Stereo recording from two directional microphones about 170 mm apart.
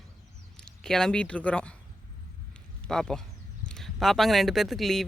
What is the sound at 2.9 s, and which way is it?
Speech, 5° left (ahead or behind).